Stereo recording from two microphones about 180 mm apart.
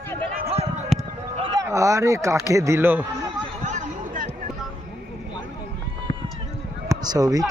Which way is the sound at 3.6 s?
40° right (ahead or behind).